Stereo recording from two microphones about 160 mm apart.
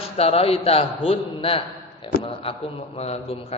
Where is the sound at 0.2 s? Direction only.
40° left (ahead or behind).